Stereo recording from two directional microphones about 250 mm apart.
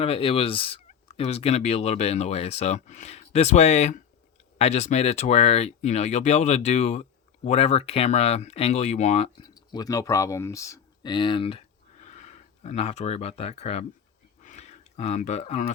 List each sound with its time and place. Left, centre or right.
0.0 s turkey: left
4.5 s speech: left
14.4 s a sound: left